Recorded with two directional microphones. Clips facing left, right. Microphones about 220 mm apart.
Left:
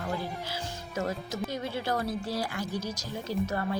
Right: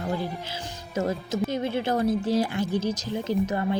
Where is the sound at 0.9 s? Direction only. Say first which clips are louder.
Right 6 dB; 20° right (ahead or behind).